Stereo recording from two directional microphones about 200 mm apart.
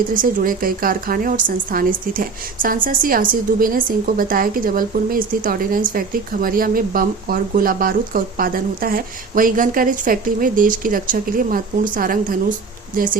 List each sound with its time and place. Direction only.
0.1 s a woman's voice: 45° right (ahead or behind)